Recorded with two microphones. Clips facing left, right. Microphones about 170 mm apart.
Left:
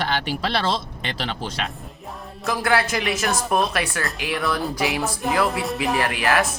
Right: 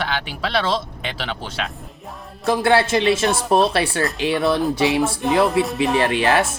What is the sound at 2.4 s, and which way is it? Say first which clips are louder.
Speech: right 5 dB; 30° right (ahead or behind).